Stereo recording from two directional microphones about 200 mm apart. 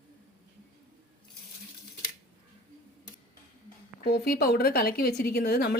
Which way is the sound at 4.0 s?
50° left (ahead or behind).